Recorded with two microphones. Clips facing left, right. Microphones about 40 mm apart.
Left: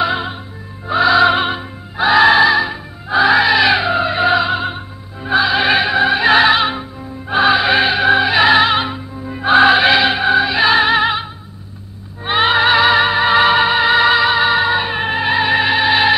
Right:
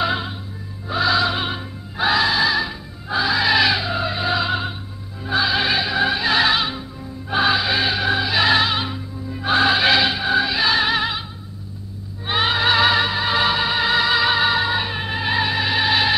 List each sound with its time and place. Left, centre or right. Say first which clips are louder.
0.0 s music: left 4 dB; centre
0.8 s music: left 7 dB; left
1.2 s music: left 9 dB; left
1.5 s music: left 5 dB; centre
2.1 s music: left 10 dB; left
2.5 s music: left 6 dB; left
3.4 s music: left 4 dB; centre
3.7 s music: left 7 dB; left
5.7 s opera: left 7 dB; left
5.9 s opera: left 6 dB; centre
6.2 s music: left 7 dB; left
7.3 s music: left 6 dB; left
13.0 s music: left 7 dB; left